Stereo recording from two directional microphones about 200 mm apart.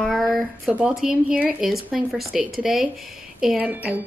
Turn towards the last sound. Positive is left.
turn(degrees=-10)  # may be behind; listen again after turning